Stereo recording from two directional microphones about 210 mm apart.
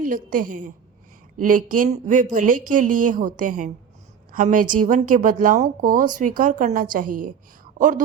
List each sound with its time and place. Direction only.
0.0 s a woman's voice: 40° right (ahead or behind)